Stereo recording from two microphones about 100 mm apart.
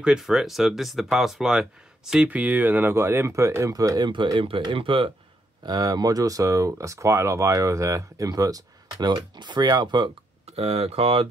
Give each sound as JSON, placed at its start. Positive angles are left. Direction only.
{"t": 0.0, "sound": "speech", "side_deg": -5}
{"t": 4.1, "sound": "speech", "side_deg": -55}
{"t": 5.7, "sound": "speech", "side_deg": -40}
{"t": 10.5, "sound": "speech", "side_deg": -80}